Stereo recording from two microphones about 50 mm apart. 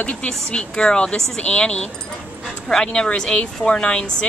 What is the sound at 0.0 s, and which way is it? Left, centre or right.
Speech, left.